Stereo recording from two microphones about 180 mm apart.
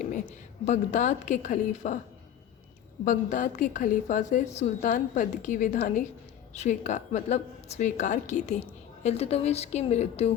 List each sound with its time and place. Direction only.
0.6 s a woman's voice: 40° left (ahead or behind)
3.0 s a woman's voice: 45° left (ahead or behind)